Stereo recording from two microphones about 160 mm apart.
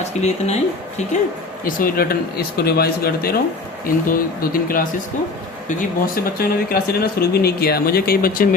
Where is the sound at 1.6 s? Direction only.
65° left (ahead or behind).